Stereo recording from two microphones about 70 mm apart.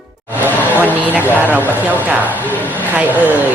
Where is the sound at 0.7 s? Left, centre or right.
Right.